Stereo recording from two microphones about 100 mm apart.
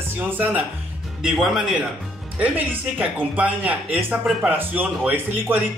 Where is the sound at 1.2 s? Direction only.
5° right (ahead or behind).